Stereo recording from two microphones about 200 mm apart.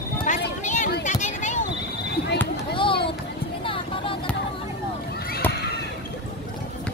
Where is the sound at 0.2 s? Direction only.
40° left (ahead or behind).